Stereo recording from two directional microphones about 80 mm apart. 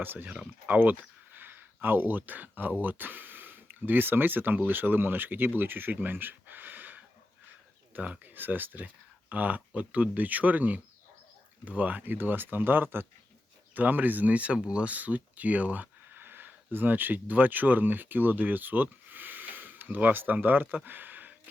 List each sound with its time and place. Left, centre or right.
0.0 s speech: right